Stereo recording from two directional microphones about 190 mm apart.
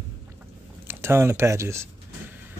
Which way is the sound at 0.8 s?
15° right (ahead or behind).